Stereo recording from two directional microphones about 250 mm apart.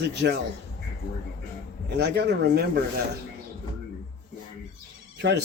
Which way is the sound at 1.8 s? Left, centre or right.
Right.